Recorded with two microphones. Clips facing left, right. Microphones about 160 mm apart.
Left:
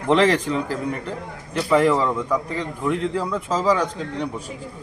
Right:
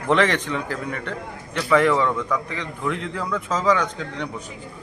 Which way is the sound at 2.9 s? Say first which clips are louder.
Left 4 dB; 35° left (ahead or behind).